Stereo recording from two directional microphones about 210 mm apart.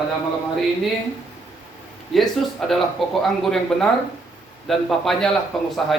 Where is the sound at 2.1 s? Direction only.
Centre (ahead or behind).